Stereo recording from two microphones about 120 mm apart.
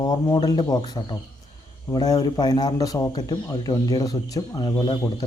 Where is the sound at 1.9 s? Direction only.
35° left (ahead or behind).